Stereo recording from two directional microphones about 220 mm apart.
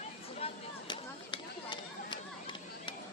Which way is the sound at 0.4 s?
20° left (ahead or behind).